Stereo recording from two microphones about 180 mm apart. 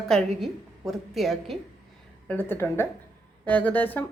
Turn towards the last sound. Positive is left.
turn(degrees=10)  # may be behind; listen again after turning